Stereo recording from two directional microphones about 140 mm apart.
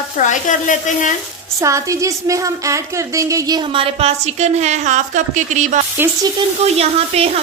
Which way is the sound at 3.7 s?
45° right (ahead or behind).